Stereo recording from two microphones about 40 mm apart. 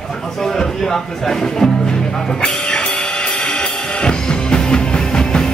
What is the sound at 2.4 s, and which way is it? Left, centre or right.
Music, left.